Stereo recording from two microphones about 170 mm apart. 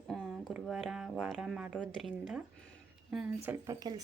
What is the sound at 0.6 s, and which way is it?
Speech, centre (ahead or behind).